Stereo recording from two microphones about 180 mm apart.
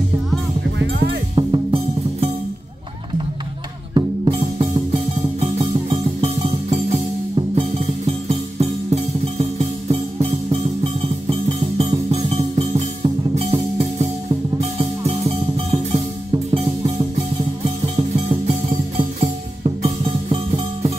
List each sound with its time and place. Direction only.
0.7 s music: 75° right (ahead or behind)
1.3 s music: 30° right (ahead or behind)
3.9 s music: 25° right (ahead or behind)
17.9 s music: 35° right (ahead or behind)